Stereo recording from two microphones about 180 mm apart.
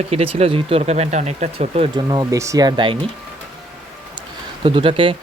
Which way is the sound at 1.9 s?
20° right (ahead or behind).